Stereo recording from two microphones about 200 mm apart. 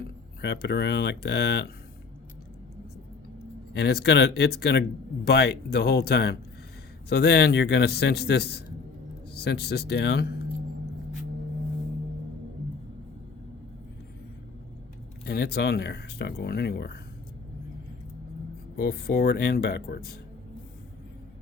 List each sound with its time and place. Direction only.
0.4 s speech: 55° left (ahead or behind)
3.7 s speech: 55° left (ahead or behind)
15.3 s speech: 50° left (ahead or behind)
18.8 s speech: 50° left (ahead or behind)